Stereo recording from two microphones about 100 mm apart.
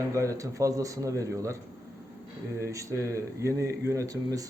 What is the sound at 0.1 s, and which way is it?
A man's voice, 30° right (ahead or behind).